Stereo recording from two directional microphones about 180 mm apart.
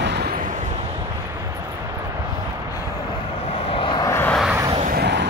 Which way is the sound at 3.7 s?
30° left (ahead or behind).